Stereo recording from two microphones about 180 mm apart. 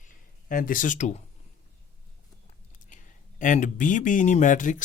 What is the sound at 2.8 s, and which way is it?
Speech, 45° left (ahead or behind).